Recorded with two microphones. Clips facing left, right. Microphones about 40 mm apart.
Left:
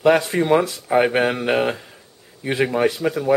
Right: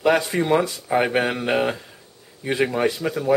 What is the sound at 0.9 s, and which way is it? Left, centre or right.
Speech, centre.